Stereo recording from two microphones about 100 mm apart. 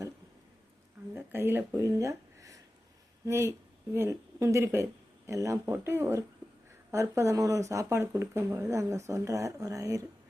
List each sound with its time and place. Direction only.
1.1 s speech: 20° right (ahead or behind)
1.8 s a sound: 30° right (ahead or behind)
3.2 s speech: 30° right (ahead or behind)